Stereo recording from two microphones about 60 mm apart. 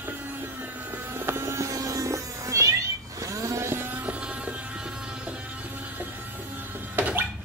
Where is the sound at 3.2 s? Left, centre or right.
Right; by 5.4 s centre.